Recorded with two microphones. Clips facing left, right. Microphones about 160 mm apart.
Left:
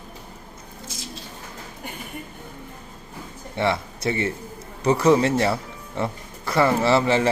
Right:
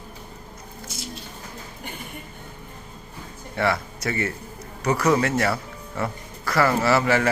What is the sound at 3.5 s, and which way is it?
A man's voice, 25° left (ahead or behind).